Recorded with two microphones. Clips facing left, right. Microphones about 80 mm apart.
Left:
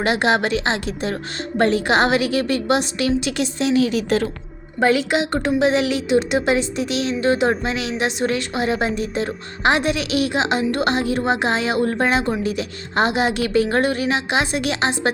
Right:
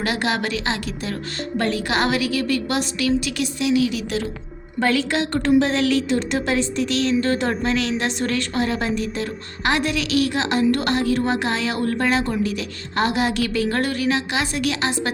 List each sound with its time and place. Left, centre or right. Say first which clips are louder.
0.0 s a woman's voice: left 5 dB; left
4.8 s a woman's voice: left 3 dB; centre